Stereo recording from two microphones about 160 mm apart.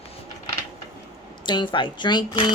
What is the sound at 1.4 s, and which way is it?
Speech, 30° left (ahead or behind).